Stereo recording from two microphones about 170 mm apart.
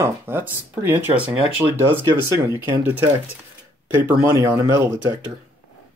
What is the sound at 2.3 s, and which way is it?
Speech, 20° right (ahead or behind).